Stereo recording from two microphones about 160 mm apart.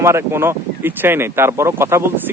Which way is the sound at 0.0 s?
15° right (ahead or behind).